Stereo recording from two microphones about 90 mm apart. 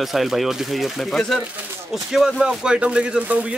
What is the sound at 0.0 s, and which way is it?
Speech, centre (ahead or behind).